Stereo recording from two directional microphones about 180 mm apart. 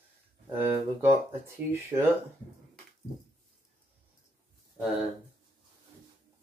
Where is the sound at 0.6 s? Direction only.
15° right (ahead or behind).